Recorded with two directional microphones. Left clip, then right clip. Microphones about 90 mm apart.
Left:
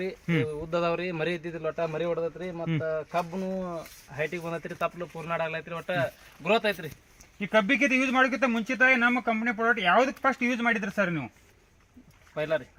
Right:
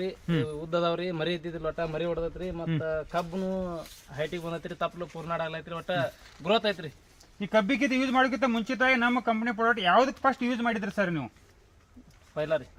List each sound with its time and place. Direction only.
0.4 s a man's voice: centre (ahead or behind)
4.1 s speech: 10° left (ahead or behind)
6.4 s a man's voice: 5° right (ahead or behind)
7.3 s speech: 20° left (ahead or behind)
12.3 s speech: 10° left (ahead or behind)